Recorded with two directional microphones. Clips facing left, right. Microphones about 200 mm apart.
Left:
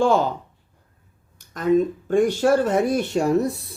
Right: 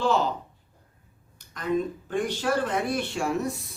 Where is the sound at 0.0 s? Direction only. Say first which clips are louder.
Left 6 dB; 50° left (ahead or behind).